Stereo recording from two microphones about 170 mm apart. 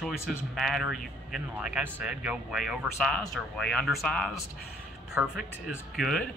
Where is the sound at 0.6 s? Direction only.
Centre (ahead or behind).